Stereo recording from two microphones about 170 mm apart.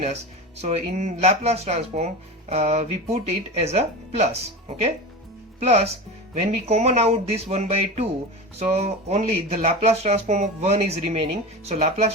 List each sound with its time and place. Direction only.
0.0 s speech: 40° right (ahead or behind)